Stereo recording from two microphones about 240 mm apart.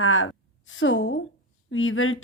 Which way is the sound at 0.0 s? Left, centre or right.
Left.